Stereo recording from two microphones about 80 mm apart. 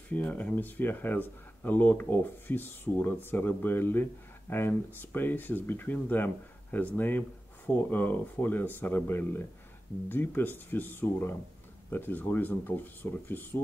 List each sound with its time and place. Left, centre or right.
0.1 s speech: centre